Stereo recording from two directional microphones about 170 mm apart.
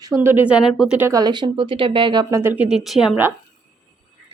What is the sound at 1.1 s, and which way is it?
Speech, 25° right (ahead or behind).